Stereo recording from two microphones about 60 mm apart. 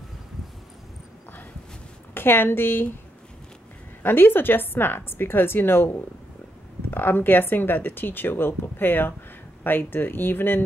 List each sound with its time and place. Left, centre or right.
2.1 s speech: left
4.0 s speech: left